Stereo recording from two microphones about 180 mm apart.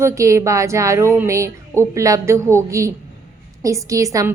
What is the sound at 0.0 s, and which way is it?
A woman's voice, 15° right (ahead or behind).